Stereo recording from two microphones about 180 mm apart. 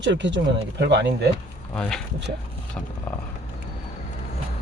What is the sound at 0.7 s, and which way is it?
Speech, 70° right (ahead or behind).